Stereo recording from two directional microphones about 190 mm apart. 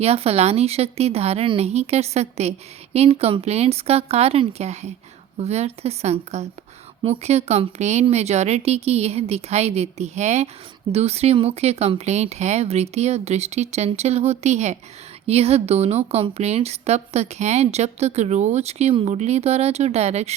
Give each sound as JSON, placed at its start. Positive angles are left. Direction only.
{"t": 0.0, "sound": "a woman's voice", "side_deg": -30}